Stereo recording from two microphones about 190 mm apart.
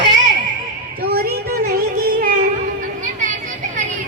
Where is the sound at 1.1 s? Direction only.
55° right (ahead or behind).